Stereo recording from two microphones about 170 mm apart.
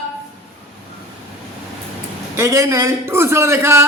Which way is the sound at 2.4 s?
15° right (ahead or behind).